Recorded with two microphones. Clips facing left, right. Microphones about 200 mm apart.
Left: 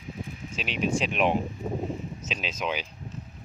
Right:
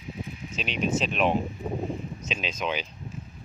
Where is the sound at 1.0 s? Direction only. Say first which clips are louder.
Even; 15° left (ahead or behind).